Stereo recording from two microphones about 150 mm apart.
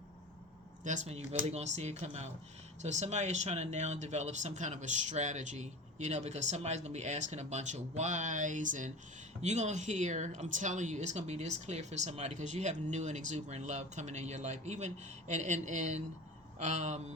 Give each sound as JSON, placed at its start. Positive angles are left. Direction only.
{"t": 0.9, "sound": "speech", "side_deg": -50}